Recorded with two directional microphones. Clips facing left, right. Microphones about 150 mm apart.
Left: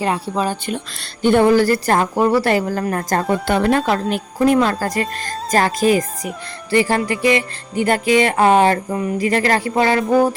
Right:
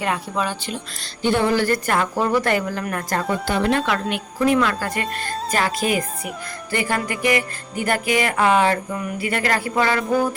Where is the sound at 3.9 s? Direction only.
35° left (ahead or behind).